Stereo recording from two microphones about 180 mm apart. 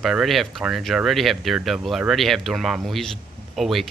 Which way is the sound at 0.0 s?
Centre (ahead or behind).